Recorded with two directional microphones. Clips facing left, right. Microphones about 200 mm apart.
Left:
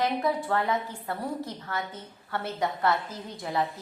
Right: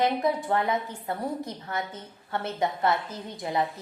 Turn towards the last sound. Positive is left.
turn(degrees=-20)  # may be behind; listen again after turning